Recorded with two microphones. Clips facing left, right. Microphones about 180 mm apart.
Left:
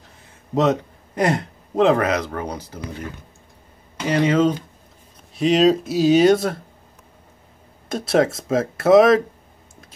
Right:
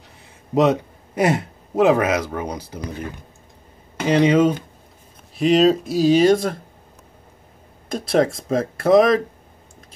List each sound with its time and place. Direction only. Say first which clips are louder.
0.6 s speech: right 2 dB; 10° right (ahead or behind)
4.1 s speech: right 2 dB; 15° right (ahead or behind)
5.3 s speech: right 1 dB; centre (ahead or behind)
7.9 s speech: even; centre (ahead or behind)